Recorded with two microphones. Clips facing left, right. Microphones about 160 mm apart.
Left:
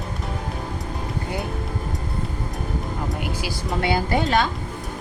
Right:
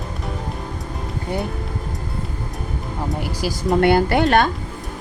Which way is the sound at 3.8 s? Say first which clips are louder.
Right 5 dB; 65° right (ahead or behind).